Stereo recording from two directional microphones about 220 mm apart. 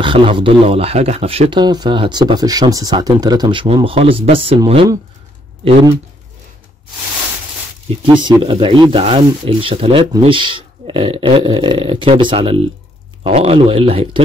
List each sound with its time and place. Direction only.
0.0 s speech: 25° right (ahead or behind)
8.0 s speech: 20° right (ahead or behind)